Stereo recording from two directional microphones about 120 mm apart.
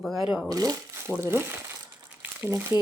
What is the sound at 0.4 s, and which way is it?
Speech, 30° right (ahead or behind).